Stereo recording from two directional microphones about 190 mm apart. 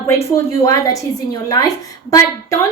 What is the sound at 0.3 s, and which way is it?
A woman's voice, 15° left (ahead or behind).